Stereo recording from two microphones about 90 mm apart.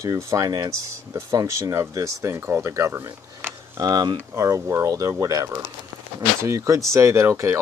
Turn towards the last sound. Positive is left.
turn(degrees=-30)  # may be behind; listen again after turning